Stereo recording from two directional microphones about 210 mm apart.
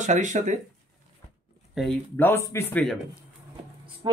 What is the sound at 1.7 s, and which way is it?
Speech, centre (ahead or behind).